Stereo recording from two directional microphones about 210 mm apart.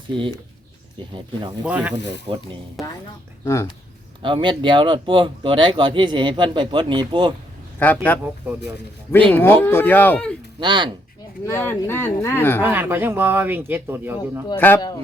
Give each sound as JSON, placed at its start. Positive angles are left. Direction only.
{"t": 1.6, "sound": "speech", "side_deg": -5}
{"t": 2.3, "sound": "speech", "side_deg": -20}
{"t": 3.4, "sound": "speech", "side_deg": 15}
{"t": 4.2, "sound": "speech", "side_deg": -25}
{"t": 7.8, "sound": "speech", "side_deg": 10}
{"t": 9.3, "sound": "speech", "side_deg": 10}
{"t": 10.6, "sound": "speech", "side_deg": -20}
{"t": 11.4, "sound": "speech", "side_deg": 10}
{"t": 12.6, "sound": "speech", "side_deg": -10}
{"t": 14.6, "sound": "speech", "side_deg": 15}